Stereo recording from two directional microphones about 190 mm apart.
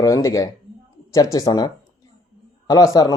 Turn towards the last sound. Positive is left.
turn(degrees=20)  # may be behind; listen again after turning